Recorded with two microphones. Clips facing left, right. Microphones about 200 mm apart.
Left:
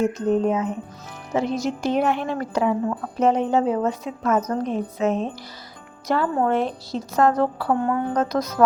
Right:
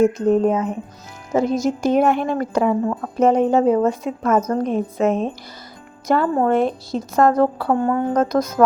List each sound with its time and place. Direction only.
0.3 s speech: 50° right (ahead or behind)